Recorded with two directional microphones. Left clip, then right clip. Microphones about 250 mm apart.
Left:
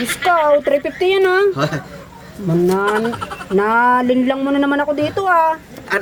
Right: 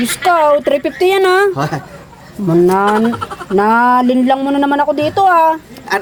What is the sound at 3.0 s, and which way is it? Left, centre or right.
Speech, centre.